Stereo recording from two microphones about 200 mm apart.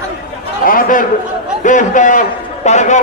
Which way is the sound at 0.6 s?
45° left (ahead or behind).